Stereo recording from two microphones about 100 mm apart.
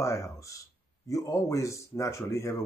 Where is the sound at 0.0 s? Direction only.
30° left (ahead or behind).